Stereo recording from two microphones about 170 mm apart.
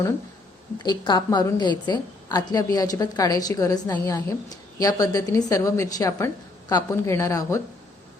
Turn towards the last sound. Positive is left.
turn(degrees=20)  # may be behind; listen again after turning